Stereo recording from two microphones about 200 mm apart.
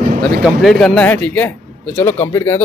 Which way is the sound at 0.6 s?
Centre (ahead or behind).